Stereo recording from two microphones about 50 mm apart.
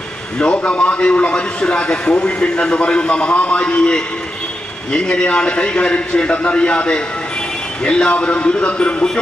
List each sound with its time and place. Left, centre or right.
0.4 s a man's voice: left